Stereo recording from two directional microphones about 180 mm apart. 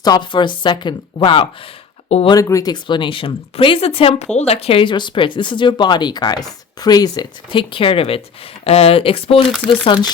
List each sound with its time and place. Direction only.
0.0 s speech: 25° left (ahead or behind)
2.3 s speech: 20° left (ahead or behind)